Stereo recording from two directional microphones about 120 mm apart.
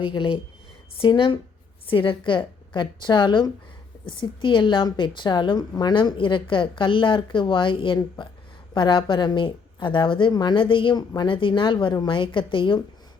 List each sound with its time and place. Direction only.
0.0 s a woman's voice: 45° left (ahead or behind)